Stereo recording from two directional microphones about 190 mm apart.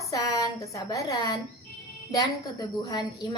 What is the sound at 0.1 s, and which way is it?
A woman's voice, 20° left (ahead or behind).